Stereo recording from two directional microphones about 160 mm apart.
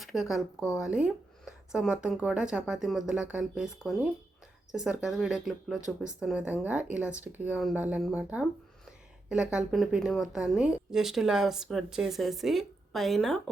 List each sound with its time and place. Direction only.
0.0 s a woman's voice: centre (ahead or behind)